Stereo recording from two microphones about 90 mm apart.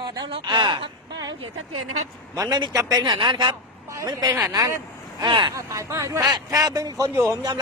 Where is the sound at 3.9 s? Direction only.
40° right (ahead or behind).